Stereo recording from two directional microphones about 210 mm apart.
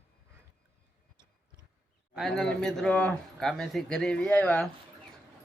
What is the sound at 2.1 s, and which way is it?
Speech, centre (ahead or behind).